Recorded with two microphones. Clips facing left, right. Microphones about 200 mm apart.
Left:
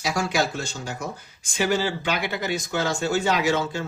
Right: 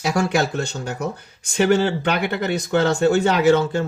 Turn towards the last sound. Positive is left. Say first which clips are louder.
# right 7 dB
turn(degrees=-55)  # may be behind; listen again after turning